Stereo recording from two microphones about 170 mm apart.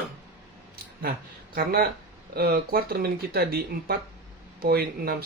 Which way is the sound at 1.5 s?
65° right (ahead or behind).